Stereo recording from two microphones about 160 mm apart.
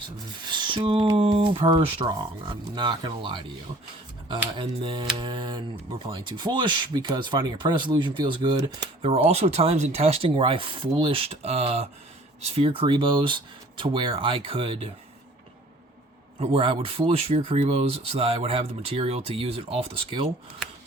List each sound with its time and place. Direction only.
0.3 s rub: 30° right (ahead or behind)
1.1 s speech: 35° right (ahead or behind)
4.5 s speech: 30° right (ahead or behind)
16.4 s speech: 35° right (ahead or behind)